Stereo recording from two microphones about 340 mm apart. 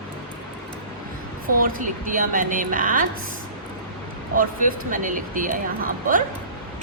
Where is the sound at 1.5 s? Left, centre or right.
Right.